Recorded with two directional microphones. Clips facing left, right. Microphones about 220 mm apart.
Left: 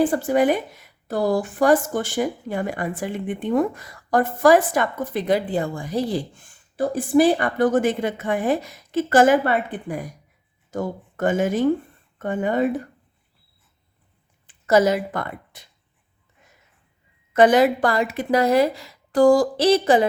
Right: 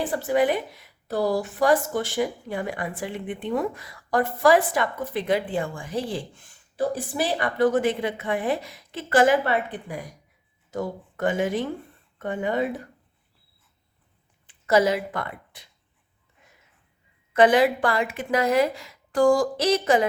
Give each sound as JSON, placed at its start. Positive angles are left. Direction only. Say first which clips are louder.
{"t": 0.0, "sound": "speech", "louder": "left 4 dB", "side_deg": 45}
{"t": 14.4, "sound": "speech", "louder": "left 3 dB", "side_deg": 45}
{"t": 17.3, "sound": "a woman's voice", "louder": "left 3 dB", "side_deg": 45}